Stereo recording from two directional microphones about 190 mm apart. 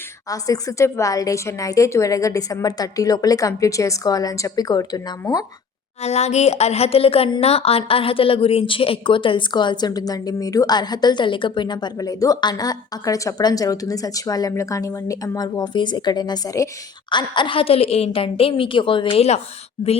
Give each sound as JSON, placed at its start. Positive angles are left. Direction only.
{"t": 0.3, "sound": "a woman's voice", "side_deg": 20}
{"t": 6.0, "sound": "speech", "side_deg": 35}